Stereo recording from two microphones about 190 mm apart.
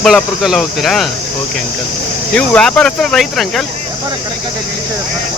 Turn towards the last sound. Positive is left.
turn(degrees=0)  # may be behind; listen again after turning